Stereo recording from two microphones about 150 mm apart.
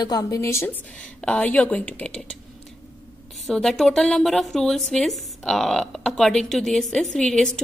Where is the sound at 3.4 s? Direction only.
Centre (ahead or behind).